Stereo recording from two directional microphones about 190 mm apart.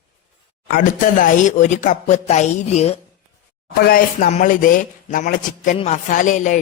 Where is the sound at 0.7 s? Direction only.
45° left (ahead or behind).